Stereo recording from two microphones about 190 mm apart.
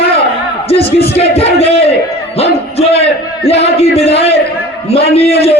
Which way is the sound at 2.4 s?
30° left (ahead or behind).